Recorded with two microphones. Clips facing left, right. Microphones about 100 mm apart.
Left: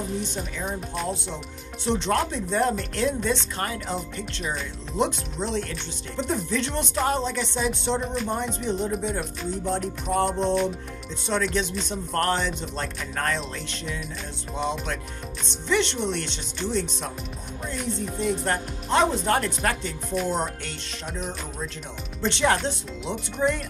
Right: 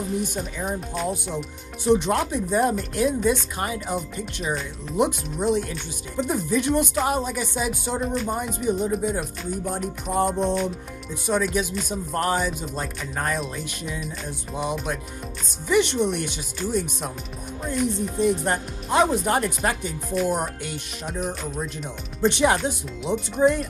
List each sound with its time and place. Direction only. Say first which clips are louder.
1.9 s speech: right 4 dB; 15° right (ahead or behind)
18.1 s speech: right 2 dB; 20° right (ahead or behind)
22.2 s speech: right 3 dB; 15° right (ahead or behind)